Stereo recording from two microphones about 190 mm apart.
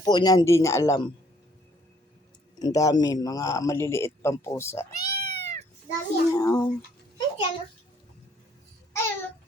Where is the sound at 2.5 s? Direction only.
20° left (ahead or behind).